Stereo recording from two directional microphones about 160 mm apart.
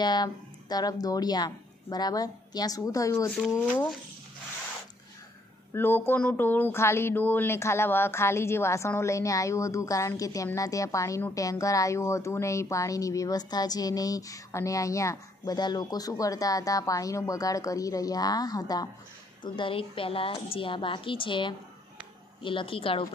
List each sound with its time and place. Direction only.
0.0 s speech: 25° left (ahead or behind)
3.3 s speech: centre (ahead or behind)
5.7 s a woman's voice: 15° left (ahead or behind); by 23.0 s 35° left (ahead or behind)